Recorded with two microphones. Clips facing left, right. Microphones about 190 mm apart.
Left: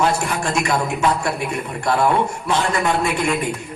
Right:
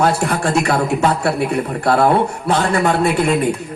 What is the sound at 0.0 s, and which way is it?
Speech, 35° right (ahead or behind).